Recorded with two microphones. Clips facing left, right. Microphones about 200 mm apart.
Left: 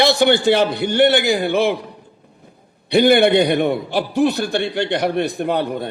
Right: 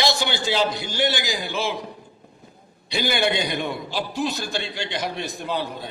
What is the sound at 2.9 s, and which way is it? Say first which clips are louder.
A man's voice: left 11 dB; 60° left (ahead or behind).